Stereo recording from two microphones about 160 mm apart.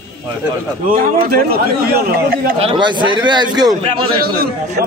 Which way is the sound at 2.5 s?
35° right (ahead or behind).